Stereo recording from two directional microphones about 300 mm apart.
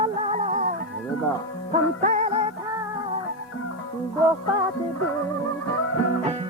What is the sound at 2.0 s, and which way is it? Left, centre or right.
Music, right.